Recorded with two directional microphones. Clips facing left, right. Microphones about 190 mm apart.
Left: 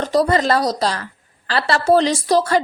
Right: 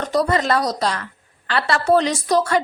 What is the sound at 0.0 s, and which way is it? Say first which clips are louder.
Speech: left 3 dB; 30° left (ahead or behind).